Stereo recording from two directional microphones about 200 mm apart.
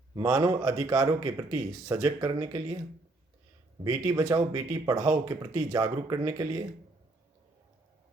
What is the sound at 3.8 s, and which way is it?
Speech, 15° right (ahead or behind).